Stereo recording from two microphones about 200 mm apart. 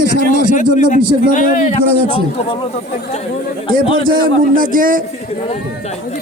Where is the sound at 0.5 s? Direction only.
35° left (ahead or behind).